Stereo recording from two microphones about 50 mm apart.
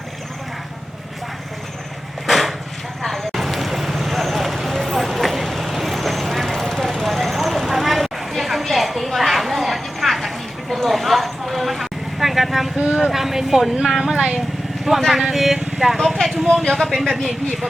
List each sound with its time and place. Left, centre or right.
2.2 s vehicle: centre
13.0 s speech: centre
14.2 s speech: centre
14.9 s speech: centre
15.5 s vehicle: centre
16.2 s speech: centre